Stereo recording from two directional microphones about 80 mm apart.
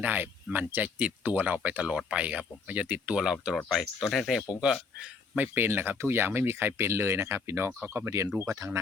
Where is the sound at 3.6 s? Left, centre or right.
Centre.